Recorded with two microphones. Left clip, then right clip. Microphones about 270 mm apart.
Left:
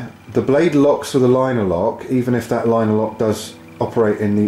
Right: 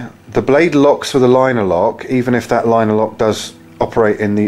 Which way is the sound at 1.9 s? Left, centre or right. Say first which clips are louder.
Right 4 dB; centre.